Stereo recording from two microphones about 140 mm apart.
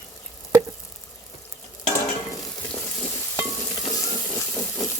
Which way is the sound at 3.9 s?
25° left (ahead or behind).